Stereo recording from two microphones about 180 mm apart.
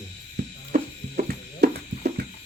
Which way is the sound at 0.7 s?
50° right (ahead or behind).